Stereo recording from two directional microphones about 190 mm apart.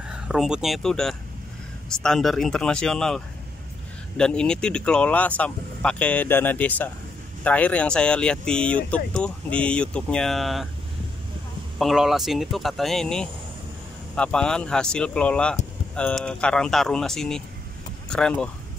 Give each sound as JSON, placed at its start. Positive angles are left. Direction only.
{"t": 0.1, "sound": "speech", "side_deg": -5}
{"t": 4.2, "sound": "speech", "side_deg": 5}
{"t": 11.8, "sound": "speech", "side_deg": 0}